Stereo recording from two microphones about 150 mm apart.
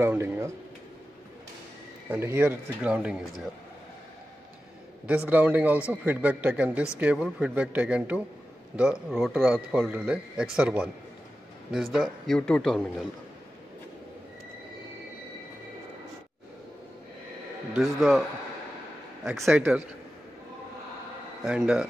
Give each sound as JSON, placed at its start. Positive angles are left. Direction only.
{"t": 0.0, "sound": "speech", "side_deg": -15}
{"t": 2.0, "sound": "speech", "side_deg": -15}
{"t": 5.0, "sound": "a man's voice", "side_deg": -10}
{"t": 11.7, "sound": "a man's voice", "side_deg": 0}
{"t": 17.7, "sound": "a man's voice", "side_deg": 0}
{"t": 21.5, "sound": "a man's voice", "side_deg": -5}